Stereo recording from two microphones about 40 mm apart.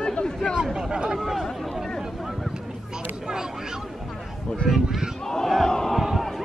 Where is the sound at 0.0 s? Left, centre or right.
Left.